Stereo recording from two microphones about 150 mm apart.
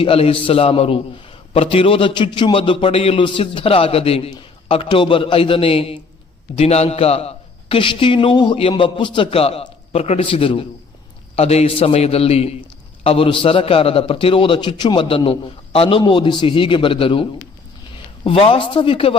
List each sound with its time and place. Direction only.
0.0 s a man's voice: 40° left (ahead or behind)